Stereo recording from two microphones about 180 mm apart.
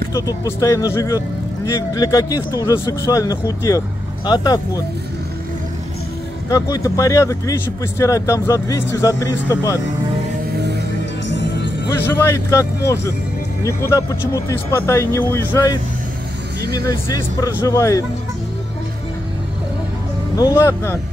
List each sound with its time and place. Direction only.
0.1 s speech: 20° left (ahead or behind)
6.5 s speech: 20° left (ahead or behind)
11.2 s music: 85° left
12.0 s speech: 15° left (ahead or behind)
20.3 s speech: 20° left (ahead or behind)